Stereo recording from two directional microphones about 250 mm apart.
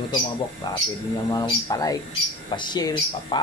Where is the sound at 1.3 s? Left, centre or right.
Centre.